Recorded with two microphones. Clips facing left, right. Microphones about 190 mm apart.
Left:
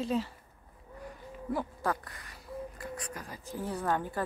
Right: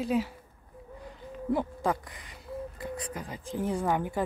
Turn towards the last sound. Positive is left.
turn(degrees=-15)  # may be behind; listen again after turning